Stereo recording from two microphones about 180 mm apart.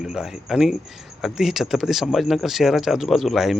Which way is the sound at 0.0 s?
5° right (ahead or behind).